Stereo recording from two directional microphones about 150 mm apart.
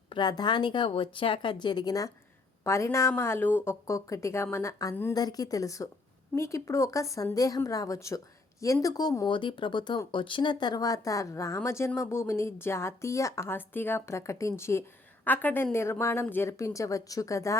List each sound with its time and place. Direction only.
0.1 s a woman's voice: 30° left (ahead or behind)